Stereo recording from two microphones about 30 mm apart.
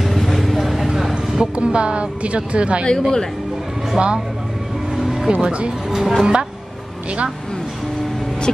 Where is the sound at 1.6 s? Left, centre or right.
Right.